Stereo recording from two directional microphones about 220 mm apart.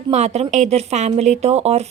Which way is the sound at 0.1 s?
30° right (ahead or behind).